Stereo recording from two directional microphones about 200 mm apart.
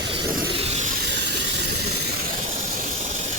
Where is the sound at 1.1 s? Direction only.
60° right (ahead or behind).